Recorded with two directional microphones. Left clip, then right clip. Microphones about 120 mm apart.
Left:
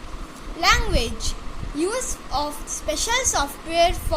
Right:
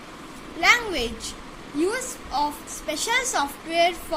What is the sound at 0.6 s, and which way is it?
A woman's voice, 25° left (ahead or behind).